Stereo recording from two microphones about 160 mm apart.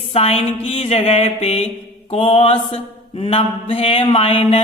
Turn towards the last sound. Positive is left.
turn(degrees=35)  # may be behind; listen again after turning